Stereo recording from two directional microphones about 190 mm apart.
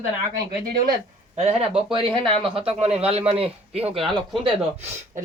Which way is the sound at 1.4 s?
30° right (ahead or behind).